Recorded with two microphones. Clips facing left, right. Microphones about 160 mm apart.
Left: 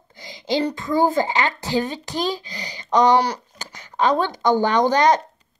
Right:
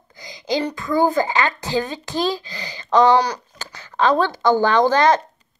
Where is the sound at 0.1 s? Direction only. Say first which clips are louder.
Even; 25° left (ahead or behind).